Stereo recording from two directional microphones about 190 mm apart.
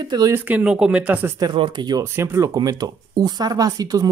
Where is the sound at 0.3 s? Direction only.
10° right (ahead or behind).